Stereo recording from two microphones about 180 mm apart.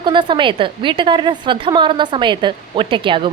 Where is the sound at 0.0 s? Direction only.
25° right (ahead or behind).